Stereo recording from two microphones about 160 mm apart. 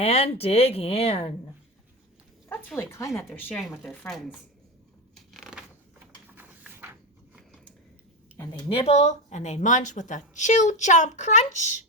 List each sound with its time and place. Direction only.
0.0 s speech: 40° left (ahead or behind)
2.7 s speech: 15° left (ahead or behind)
3.6 s speech: centre (ahead or behind)
5.1 s a sound: centre (ahead or behind)
7.3 s biting: centre (ahead or behind)
8.7 s a woman's voice: 40° left (ahead or behind)